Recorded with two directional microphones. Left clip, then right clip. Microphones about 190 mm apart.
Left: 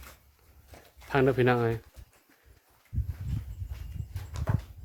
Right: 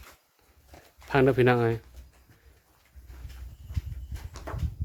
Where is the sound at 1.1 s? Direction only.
20° right (ahead or behind).